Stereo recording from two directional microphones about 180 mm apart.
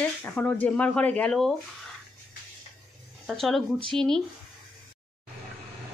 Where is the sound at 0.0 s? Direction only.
10° left (ahead or behind).